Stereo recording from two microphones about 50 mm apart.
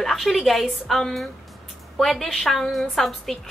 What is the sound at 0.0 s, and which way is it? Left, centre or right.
A woman's voice, centre.